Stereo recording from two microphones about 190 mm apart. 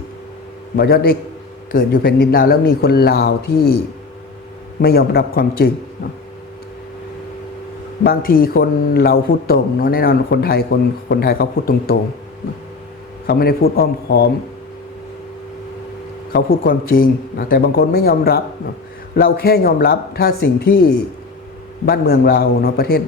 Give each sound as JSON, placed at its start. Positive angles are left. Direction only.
{"t": 0.8, "sound": "a man's voice", "side_deg": 55}
{"t": 4.8, "sound": "a man's voice", "side_deg": 55}
{"t": 8.0, "sound": "a man's voice", "side_deg": 50}
{"t": 13.2, "sound": "a man's voice", "side_deg": 55}
{"t": 16.6, "sound": "a man's voice", "side_deg": 50}